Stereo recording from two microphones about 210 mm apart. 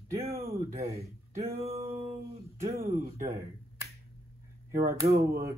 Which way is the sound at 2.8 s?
45° right (ahead or behind).